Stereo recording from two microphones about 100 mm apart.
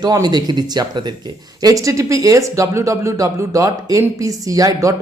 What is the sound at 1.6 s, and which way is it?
Speech, 35° right (ahead or behind).